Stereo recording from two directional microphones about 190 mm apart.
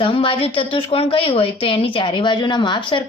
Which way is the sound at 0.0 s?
25° left (ahead or behind).